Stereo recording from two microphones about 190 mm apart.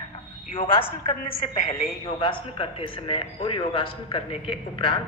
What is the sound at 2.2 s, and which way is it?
A man's voice, 30° left (ahead or behind).